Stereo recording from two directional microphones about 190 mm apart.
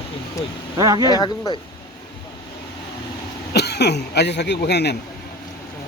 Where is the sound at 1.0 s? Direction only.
20° left (ahead or behind).